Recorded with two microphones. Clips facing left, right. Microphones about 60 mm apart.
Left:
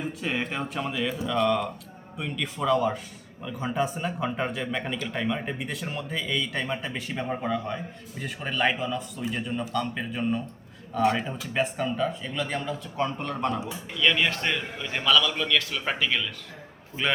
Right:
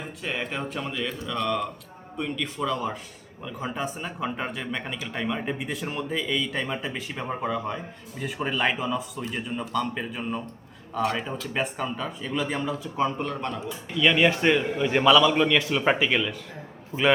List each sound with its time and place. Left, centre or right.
0.2 s speech: centre
13.9 s a man's voice: centre